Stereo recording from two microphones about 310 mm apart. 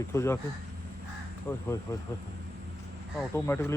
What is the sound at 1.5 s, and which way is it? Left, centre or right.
Speech, centre.